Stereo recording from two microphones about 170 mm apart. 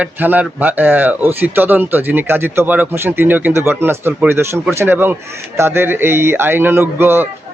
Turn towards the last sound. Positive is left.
turn(degrees=-15)  # may be behind; listen again after turning